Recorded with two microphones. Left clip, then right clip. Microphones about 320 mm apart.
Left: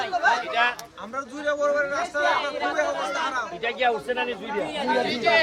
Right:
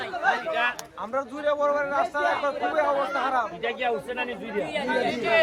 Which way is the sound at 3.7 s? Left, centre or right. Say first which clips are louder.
Left 4 dB; left.